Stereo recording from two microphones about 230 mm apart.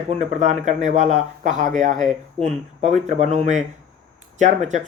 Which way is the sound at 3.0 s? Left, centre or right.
Right.